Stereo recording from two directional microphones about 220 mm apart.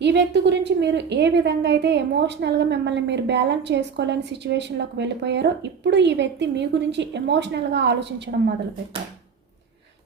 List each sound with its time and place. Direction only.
0.0 s a woman's voice: 50° right (ahead or behind)